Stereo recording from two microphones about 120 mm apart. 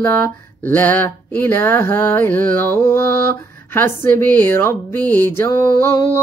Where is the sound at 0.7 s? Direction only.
15° left (ahead or behind).